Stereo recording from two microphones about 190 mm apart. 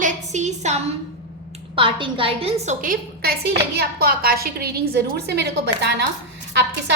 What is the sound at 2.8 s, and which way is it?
A woman's voice, 50° right (ahead or behind).